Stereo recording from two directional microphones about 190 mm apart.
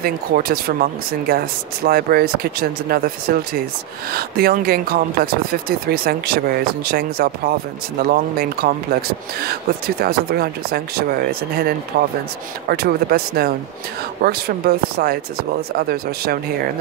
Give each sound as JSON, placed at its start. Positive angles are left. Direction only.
{"t": 0.0, "sound": "speech", "side_deg": -55}